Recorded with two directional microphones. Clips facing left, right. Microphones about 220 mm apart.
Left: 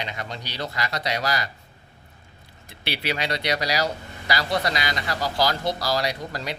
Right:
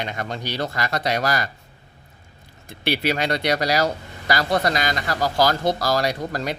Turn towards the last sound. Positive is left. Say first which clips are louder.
# right 4 dB
turn(degrees=-50)  # may be behind; listen again after turning